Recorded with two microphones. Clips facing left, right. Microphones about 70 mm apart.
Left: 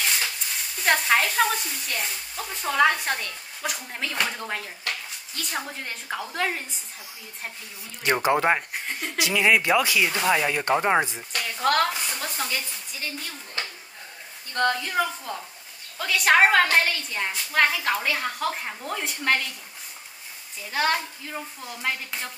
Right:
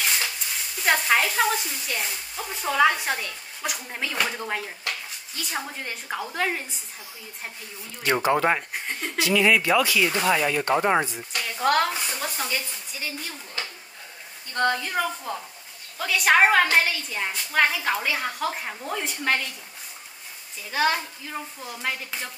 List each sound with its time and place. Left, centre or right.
0.8 s speech: centre
8.0 s speech: centre
8.8 s speech: centre
9.2 s speech: centre
11.5 s speech: centre
14.5 s a woman's voice: centre
20.7 s speech: centre